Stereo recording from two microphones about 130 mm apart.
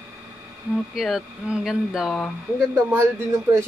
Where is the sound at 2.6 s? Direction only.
20° right (ahead or behind).